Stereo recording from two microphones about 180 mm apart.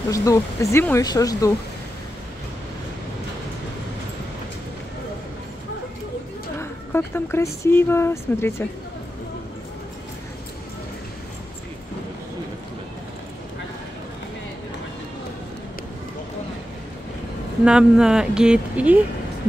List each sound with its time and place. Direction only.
0.1 s speech: 15° left (ahead or behind)
6.6 s speech: 10° left (ahead or behind)
17.6 s speech: 5° right (ahead or behind)